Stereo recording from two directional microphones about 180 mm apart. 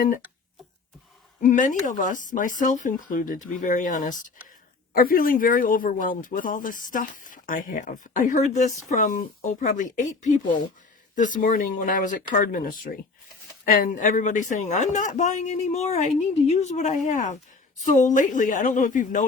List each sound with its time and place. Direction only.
1.4 s speech: 45° left (ahead or behind)